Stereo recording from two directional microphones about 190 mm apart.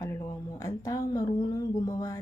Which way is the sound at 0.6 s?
15° left (ahead or behind).